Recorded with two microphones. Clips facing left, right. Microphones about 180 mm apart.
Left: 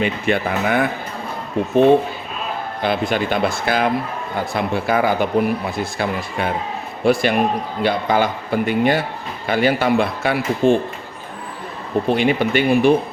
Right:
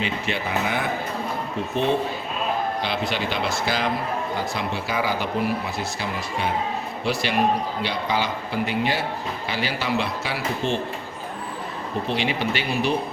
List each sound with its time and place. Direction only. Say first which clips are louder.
0.0 s a man's voice: left 7 dB; 55° left (ahead or behind)
2.8 s a man's voice: left 6 dB; 50° left (ahead or behind)
12.0 s a man's voice: left 8 dB; 50° left (ahead or behind)